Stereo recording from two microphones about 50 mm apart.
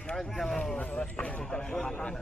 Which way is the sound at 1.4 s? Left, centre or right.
Centre.